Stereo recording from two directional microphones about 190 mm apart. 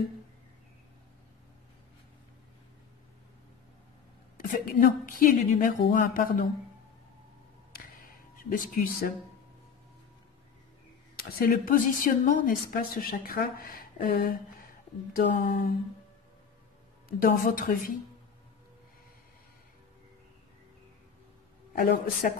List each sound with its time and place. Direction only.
4.4 s a woman's voice: 45° left (ahead or behind)
8.4 s a woman's voice: 50° left (ahead or behind)
11.2 s a woman's voice: 50° left (ahead or behind)
17.2 s a woman's voice: 45° left (ahead or behind)
21.7 s a woman's voice: 50° left (ahead or behind)